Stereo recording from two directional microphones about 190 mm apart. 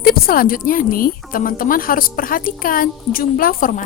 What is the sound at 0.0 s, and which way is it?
Speech, 50° left (ahead or behind).